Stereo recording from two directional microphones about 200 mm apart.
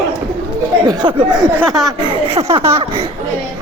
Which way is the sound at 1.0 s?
25° right (ahead or behind).